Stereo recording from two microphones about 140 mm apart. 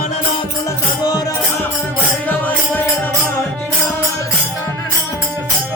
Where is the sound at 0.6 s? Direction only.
25° left (ahead or behind).